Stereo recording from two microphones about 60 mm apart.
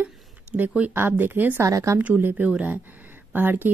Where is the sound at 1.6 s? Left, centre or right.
Right.